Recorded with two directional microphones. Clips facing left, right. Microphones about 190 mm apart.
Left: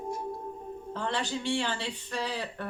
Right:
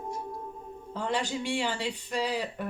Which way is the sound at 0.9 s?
10° right (ahead or behind).